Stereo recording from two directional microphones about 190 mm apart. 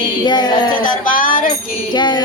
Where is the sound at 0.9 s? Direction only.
45° left (ahead or behind).